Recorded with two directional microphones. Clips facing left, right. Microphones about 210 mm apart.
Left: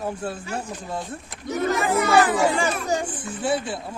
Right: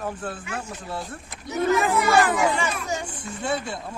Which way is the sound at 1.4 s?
50° left (ahead or behind).